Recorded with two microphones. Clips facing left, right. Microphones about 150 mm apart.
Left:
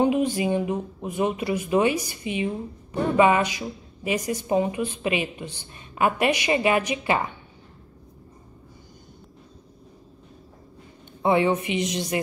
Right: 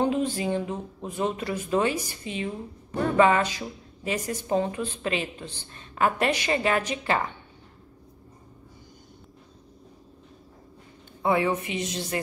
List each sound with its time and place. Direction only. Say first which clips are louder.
0.0 s speech: left 4 dB; 15° left (ahead or behind)
11.2 s a woman's voice: left 3 dB; 20° left (ahead or behind)